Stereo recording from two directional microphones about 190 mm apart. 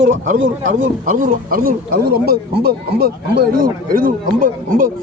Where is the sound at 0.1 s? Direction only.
40° right (ahead or behind).